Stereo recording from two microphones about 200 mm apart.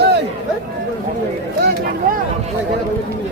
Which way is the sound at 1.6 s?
50° right (ahead or behind).